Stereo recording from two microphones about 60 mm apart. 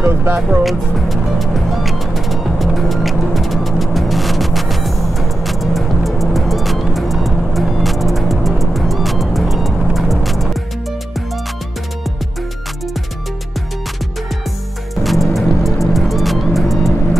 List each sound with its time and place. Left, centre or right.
0.0 s speech: right
0.7 s music: centre
15.0 s music: centre